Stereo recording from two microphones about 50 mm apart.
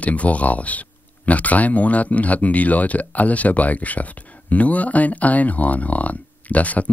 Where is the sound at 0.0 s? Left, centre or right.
Left.